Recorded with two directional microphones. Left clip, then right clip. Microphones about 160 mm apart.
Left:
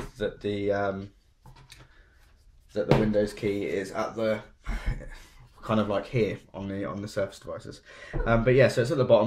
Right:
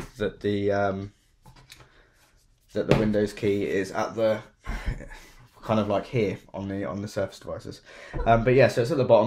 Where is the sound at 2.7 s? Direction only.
55° right (ahead or behind).